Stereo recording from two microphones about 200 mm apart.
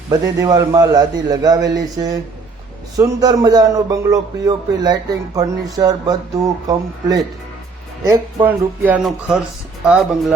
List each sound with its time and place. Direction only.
0.1 s a man's voice: 20° right (ahead or behind)
8.4 s speech: 10° right (ahead or behind)